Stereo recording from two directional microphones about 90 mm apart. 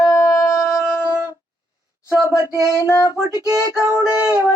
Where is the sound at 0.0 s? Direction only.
40° left (ahead or behind).